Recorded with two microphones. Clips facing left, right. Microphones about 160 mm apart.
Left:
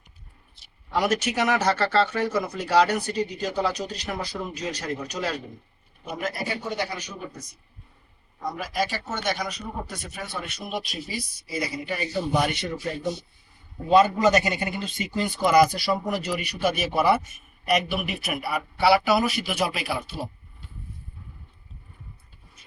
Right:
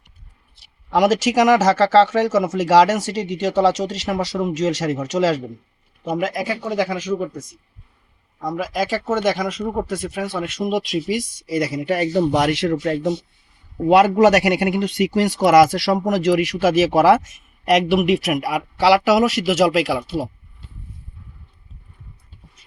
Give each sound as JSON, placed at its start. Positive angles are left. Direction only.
{"t": 0.6, "sound": "a man's voice", "side_deg": -90}
{"t": 8.4, "sound": "a man's voice", "side_deg": -90}